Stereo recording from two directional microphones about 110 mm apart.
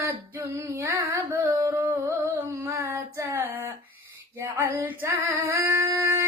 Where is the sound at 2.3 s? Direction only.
20° right (ahead or behind).